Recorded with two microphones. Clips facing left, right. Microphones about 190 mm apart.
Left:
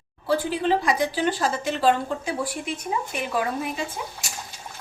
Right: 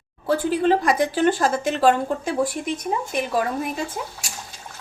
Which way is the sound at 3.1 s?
45° right (ahead or behind).